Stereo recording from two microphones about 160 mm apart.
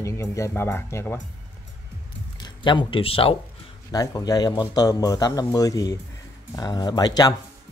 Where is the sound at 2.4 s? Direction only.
30° left (ahead or behind).